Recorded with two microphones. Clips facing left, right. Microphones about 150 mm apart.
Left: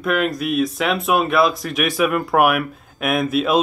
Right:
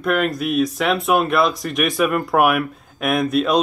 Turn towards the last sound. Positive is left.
turn(degrees=5)  # may be behind; listen again after turning